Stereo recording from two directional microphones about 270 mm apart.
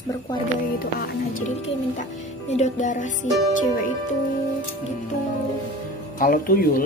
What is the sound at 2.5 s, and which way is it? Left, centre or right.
Speech, left.